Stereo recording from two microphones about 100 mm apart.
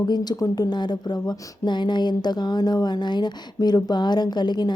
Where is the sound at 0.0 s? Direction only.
40° left (ahead or behind).